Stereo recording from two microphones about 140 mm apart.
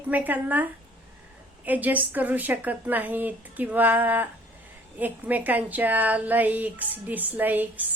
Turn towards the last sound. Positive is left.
turn(degrees=-10)  # may be behind; listen again after turning